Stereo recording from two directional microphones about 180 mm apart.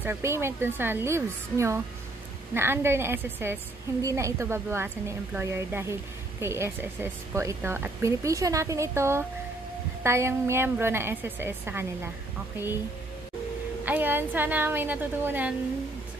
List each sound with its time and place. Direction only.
0.0 s speech: 15° right (ahead or behind)
13.8 s speech: 10° right (ahead or behind)